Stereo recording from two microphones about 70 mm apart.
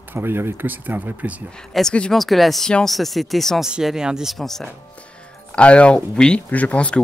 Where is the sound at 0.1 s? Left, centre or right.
Right.